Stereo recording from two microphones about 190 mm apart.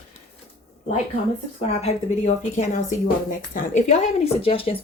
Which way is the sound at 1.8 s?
35° left (ahead or behind).